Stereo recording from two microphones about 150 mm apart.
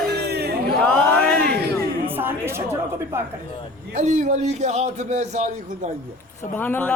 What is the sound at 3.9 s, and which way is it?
A man's voice, 50° right (ahead or behind).